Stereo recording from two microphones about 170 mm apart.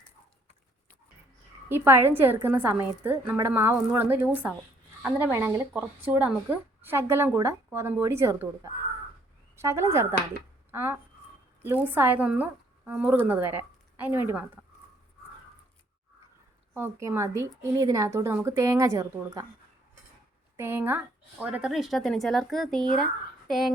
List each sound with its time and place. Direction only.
1.7 s speech: 15° right (ahead or behind)
9.6 s a woman's voice: 15° right (ahead or behind)
16.7 s speech: 15° right (ahead or behind)
20.6 s speech: 15° right (ahead or behind)